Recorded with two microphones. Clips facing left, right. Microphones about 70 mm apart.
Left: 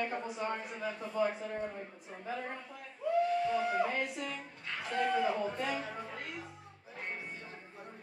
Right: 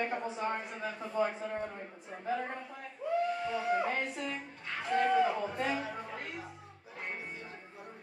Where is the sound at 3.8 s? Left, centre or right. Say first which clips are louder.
Right 1 dB; right.